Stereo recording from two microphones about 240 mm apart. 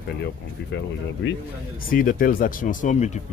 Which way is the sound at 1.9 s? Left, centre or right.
Left.